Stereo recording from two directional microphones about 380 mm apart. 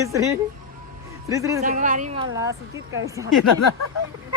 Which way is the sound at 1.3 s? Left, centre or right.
Centre.